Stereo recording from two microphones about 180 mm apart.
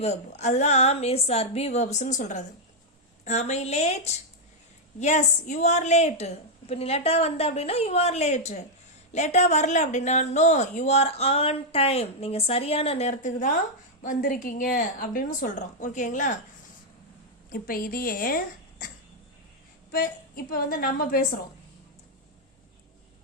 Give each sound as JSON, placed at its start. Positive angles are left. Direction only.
{"t": 0.0, "sound": "speech", "side_deg": 40}
{"t": 17.5, "sound": "a woman's voice", "side_deg": 55}
{"t": 19.9, "sound": "a woman's voice", "side_deg": 55}